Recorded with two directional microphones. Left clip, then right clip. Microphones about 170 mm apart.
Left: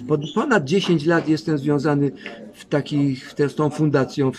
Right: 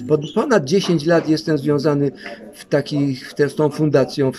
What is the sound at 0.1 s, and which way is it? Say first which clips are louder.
Speech: right 3 dB; 20° left (ahead or behind).